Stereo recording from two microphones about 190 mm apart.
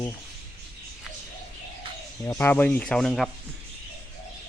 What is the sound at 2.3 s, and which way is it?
A man's voice, 10° left (ahead or behind).